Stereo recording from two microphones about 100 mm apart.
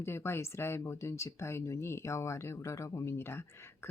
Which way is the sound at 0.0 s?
25° left (ahead or behind).